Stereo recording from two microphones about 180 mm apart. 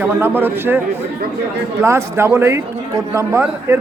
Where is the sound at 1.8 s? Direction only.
15° right (ahead or behind).